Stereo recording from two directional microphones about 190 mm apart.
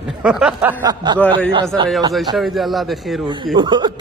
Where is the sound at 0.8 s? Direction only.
25° right (ahead or behind).